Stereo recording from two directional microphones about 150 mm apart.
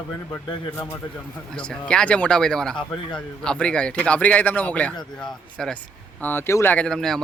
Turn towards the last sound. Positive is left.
turn(degrees=5)  # may be behind; listen again after turning